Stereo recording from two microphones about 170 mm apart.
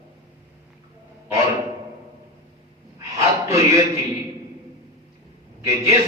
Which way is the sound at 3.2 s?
20° right (ahead or behind).